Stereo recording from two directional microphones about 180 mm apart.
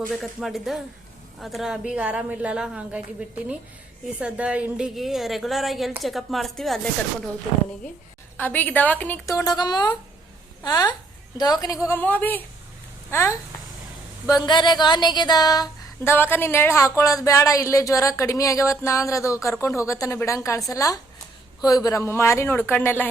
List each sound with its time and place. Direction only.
0.1 s a woman's voice: centre (ahead or behind)
8.4 s female singing: 10° left (ahead or behind)
10.6 s a woman's voice: 20° left (ahead or behind)
11.9 s female singing: 10° left (ahead or behind)
13.1 s speech: 15° left (ahead or behind)
14.4 s female singing: 25° left (ahead or behind)
20.7 s a woman's voice: 20° left (ahead or behind)
21.8 s female singing: 15° left (ahead or behind)